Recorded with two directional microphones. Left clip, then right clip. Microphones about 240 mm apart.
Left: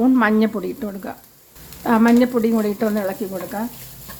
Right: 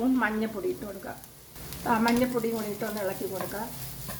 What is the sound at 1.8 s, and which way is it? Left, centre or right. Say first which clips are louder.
Speech: left 9 dB; left.